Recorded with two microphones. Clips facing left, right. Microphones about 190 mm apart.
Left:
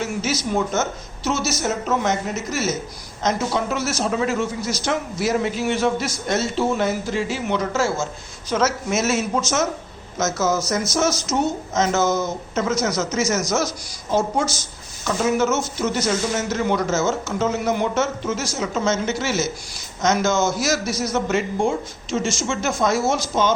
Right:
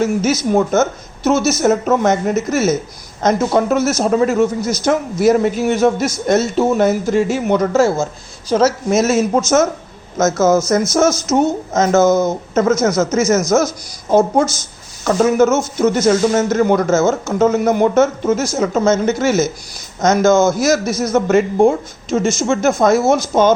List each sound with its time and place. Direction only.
0.0 s speech: 50° right (ahead or behind)